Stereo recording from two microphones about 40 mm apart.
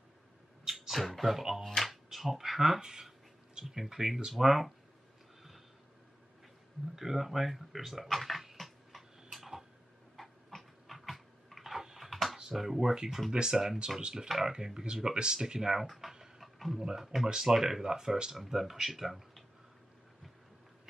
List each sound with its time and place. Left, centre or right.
0.7 s speech: centre
7.0 s a sound: centre
10.1 s dog: centre
12.1 s a sound: centre
12.4 s speech: centre
15.9 s tick-tock: centre
16.5 s a sound: centre
16.8 s speech: centre
18.3 s speech: centre